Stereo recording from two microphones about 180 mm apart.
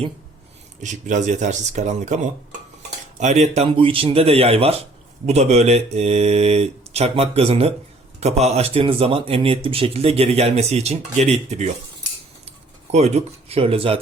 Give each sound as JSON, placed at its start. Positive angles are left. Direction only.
{"t": 0.8, "sound": "speech", "side_deg": -45}
{"t": 12.9, "sound": "speech", "side_deg": -35}